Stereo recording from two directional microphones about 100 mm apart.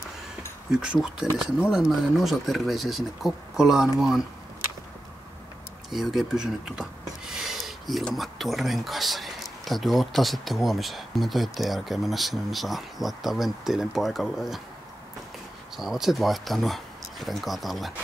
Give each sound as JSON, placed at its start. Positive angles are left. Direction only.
{"t": 0.7, "sound": "speech", "side_deg": -5}
{"t": 5.9, "sound": "speech", "side_deg": -5}
{"t": 15.7, "sound": "speech", "side_deg": -5}